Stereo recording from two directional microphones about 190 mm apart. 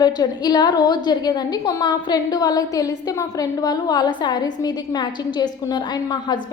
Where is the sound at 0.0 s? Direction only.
20° left (ahead or behind).